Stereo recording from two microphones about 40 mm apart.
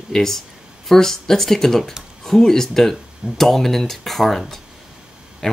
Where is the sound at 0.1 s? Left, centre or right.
Centre.